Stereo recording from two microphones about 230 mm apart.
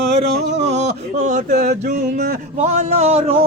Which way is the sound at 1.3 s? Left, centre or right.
Right.